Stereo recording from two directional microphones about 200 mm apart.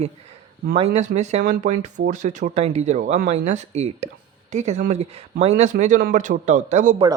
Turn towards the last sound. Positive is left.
turn(degrees=-40)  # may be behind; listen again after turning